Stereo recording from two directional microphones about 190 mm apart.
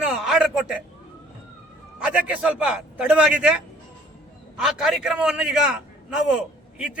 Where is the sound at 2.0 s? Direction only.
5° right (ahead or behind).